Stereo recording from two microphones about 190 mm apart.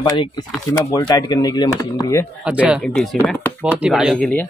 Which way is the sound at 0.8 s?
20° left (ahead or behind).